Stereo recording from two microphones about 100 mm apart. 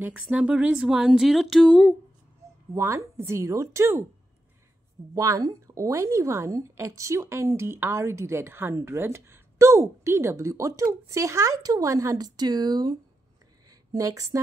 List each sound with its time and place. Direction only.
0.0 s speech: 15° right (ahead or behind); by 2.0 s 5° left (ahead or behind)
2.7 s speech: 30° right (ahead or behind)
5.1 s speech: 35° right (ahead or behind)
13.7 s a sound: 35° right (ahead or behind)